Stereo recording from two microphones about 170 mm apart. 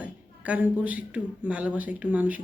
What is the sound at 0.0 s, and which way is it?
A man's voice, 10° right (ahead or behind).